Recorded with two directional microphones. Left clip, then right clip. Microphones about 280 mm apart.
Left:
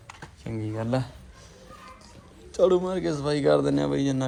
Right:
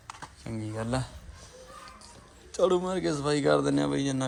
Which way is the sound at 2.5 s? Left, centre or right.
Centre.